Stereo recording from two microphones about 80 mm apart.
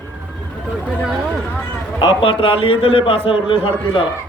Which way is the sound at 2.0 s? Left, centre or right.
Left.